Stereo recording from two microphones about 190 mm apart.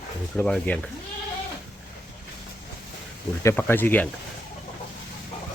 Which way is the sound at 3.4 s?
15° left (ahead or behind).